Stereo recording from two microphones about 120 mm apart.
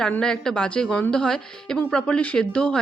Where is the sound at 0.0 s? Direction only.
5° left (ahead or behind).